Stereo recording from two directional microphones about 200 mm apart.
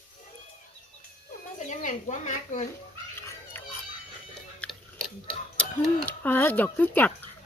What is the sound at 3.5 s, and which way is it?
Music, 10° left (ahead or behind).